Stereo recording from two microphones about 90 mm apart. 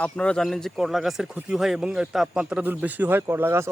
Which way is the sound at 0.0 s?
10° left (ahead or behind).